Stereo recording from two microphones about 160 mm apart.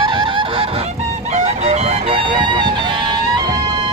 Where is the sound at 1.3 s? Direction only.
45° right (ahead or behind).